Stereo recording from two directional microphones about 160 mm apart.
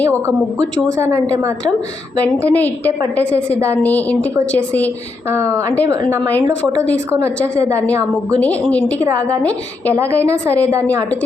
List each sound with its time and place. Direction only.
1.0 s a woman's voice: 15° right (ahead or behind)
2.2 s a woman's voice: 10° left (ahead or behind)
5.3 s a woman's voice: 20° right (ahead or behind)
6.3 s a woman's voice: 10° left (ahead or behind)
9.9 s a woman's voice: 15° right (ahead or behind)
10.3 s a woman's voice: 10° left (ahead or behind)